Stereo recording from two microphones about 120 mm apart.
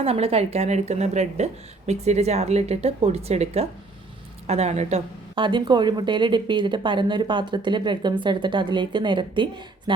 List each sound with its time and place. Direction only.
0.0 s a woman's voice: 55° right (ahead or behind)
5.3 s speech: 40° right (ahead or behind)